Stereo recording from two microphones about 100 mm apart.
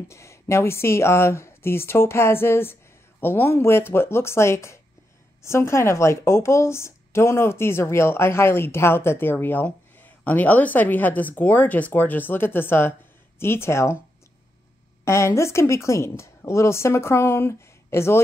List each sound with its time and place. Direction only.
0.1 s a woman's voice: 30° left (ahead or behind)
15.0 s a woman's voice: 30° left (ahead or behind)